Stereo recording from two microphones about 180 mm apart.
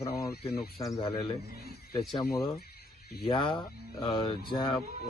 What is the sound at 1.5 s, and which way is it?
Speech, 60° left (ahead or behind).